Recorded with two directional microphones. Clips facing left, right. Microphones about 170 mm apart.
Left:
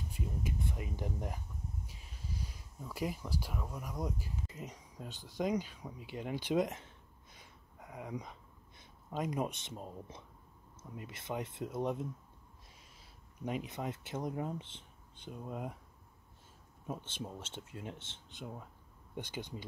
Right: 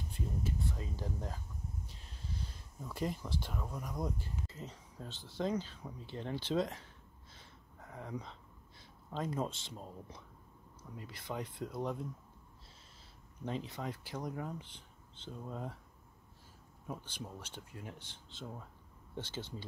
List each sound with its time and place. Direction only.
0.1 s speech: 15° left (ahead or behind)
7.3 s a sound: 15° left (ahead or behind)
10.8 s speech: 20° left (ahead or behind)
13.4 s speech: 15° left (ahead or behind)
15.1 s speech: 15° left (ahead or behind)
16.8 s speech: 25° left (ahead or behind)